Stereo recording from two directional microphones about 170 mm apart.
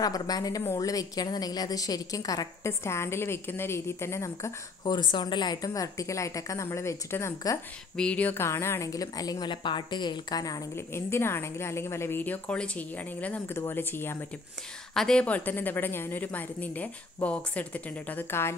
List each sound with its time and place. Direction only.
0.0 s a woman's voice: 20° left (ahead or behind)